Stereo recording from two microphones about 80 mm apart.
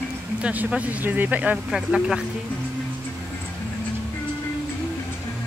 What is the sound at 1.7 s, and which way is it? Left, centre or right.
Speech, centre.